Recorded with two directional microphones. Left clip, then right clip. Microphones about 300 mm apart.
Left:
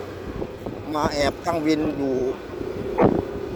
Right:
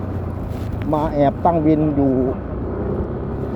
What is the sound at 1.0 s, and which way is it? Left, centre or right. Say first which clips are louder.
Speech: right 5 dB; left.